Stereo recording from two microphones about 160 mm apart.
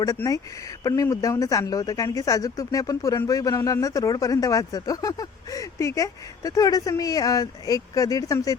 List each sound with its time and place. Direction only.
0.0 s speech: 20° left (ahead or behind)